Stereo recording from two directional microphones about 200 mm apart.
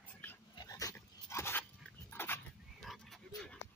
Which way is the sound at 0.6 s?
20° left (ahead or behind).